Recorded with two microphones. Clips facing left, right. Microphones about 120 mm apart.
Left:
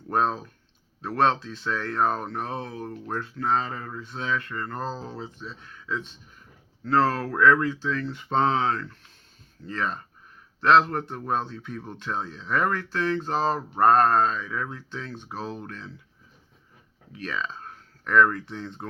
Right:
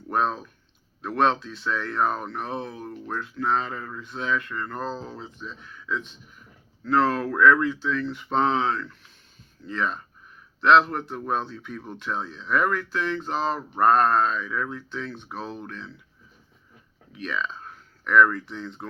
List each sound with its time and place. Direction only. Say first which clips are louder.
0.1 s a man's voice: even; 35° left (ahead or behind)
17.2 s speech: right 2 dB; 35° left (ahead or behind)